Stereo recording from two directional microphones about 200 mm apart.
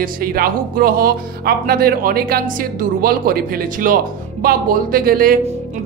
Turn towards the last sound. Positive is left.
turn(degrees=-45)  # may be behind; listen again after turning